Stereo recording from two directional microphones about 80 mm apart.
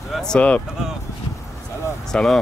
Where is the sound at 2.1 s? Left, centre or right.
Centre.